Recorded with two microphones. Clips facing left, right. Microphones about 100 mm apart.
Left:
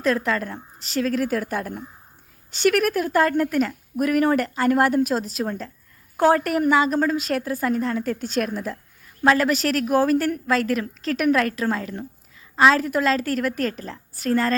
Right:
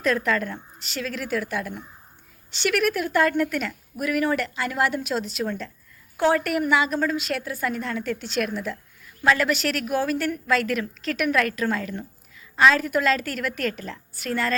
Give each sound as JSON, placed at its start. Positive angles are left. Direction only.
{"t": 0.0, "sound": "a woman's voice", "side_deg": 30}